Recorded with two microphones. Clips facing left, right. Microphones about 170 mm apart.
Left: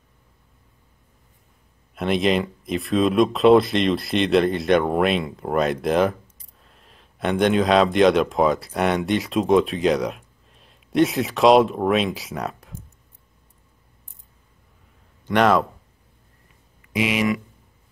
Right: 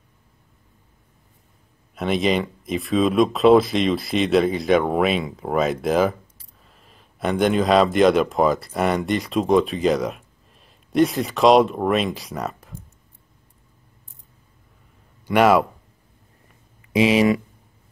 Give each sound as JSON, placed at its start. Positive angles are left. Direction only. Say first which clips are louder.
{"t": 2.0, "sound": "speech", "louder": "even", "side_deg": 0}
{"t": 15.2, "sound": "speech", "louder": "right 2 dB", "side_deg": -10}
{"t": 16.9, "sound": "speech", "louder": "right 5 dB", "side_deg": -30}